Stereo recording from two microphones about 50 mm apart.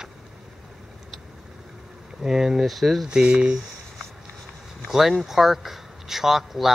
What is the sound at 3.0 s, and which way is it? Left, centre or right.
Speech, centre.